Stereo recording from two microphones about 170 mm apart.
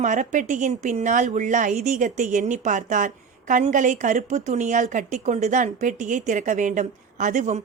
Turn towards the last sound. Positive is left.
turn(degrees=-45)  # may be behind; listen again after turning